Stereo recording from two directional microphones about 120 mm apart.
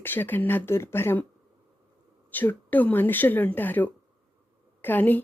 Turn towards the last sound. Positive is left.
turn(degrees=15)  # may be behind; listen again after turning